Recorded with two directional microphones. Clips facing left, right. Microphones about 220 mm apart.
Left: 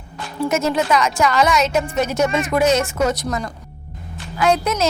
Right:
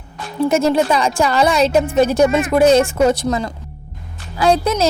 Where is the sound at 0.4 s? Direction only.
30° right (ahead or behind).